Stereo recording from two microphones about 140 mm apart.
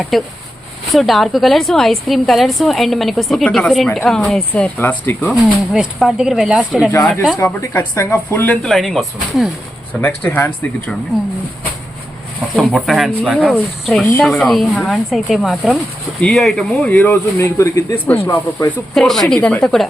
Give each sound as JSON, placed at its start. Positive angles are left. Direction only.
{"t": 0.1, "sound": "a woman's voice", "side_deg": 0}
{"t": 5.3, "sound": "a woman's voice", "side_deg": -5}
{"t": 7.0, "sound": "a woman's voice", "side_deg": 5}
{"t": 7.3, "sound": "speech", "side_deg": 20}
{"t": 8.6, "sound": "a woman's voice", "side_deg": 0}
{"t": 10.0, "sound": "speech", "side_deg": 15}
{"t": 12.5, "sound": "a woman's voice", "side_deg": 0}
{"t": 16.9, "sound": "speech", "side_deg": 15}
{"t": 18.9, "sound": "a woman's voice", "side_deg": 5}